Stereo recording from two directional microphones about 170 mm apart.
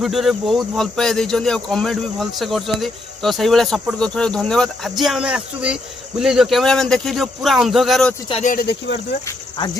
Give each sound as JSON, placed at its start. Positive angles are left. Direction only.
{"t": 0.0, "sound": "speech", "side_deg": 0}
{"t": 8.3, "sound": "speech", "side_deg": 40}
{"t": 8.5, "sound": "speech", "side_deg": 75}